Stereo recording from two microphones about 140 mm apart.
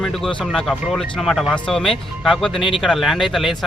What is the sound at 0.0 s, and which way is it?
A man's voice, 5° left (ahead or behind).